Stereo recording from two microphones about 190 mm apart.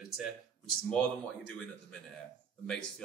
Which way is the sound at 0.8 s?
5° left (ahead or behind).